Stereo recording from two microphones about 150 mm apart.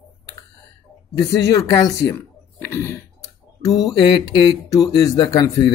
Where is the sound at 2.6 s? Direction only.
15° left (ahead or behind).